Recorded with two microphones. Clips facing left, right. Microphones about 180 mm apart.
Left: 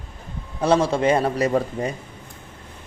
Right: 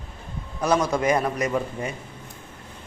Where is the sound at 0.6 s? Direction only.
30° left (ahead or behind).